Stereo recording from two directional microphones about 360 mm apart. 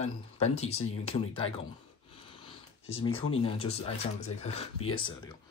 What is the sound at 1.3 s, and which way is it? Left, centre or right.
Speech, centre.